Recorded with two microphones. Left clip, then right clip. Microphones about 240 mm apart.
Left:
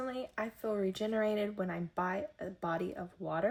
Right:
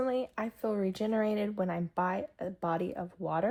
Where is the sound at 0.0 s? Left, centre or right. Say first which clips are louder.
Right 6 dB; centre.